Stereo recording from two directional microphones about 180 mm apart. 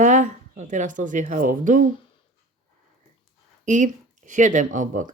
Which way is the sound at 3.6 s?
45° right (ahead or behind).